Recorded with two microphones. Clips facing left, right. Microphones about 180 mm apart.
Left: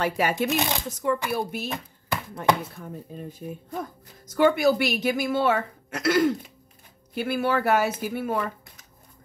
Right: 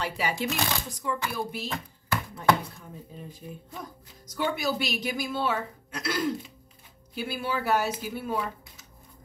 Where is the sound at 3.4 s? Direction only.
55° left (ahead or behind).